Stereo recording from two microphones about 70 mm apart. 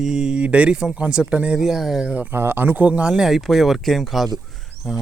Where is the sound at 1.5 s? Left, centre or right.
Centre.